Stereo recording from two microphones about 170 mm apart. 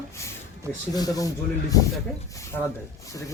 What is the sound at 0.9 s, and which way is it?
Speech, 20° left (ahead or behind).